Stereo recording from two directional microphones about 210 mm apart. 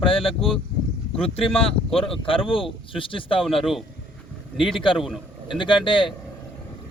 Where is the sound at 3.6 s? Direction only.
Centre (ahead or behind).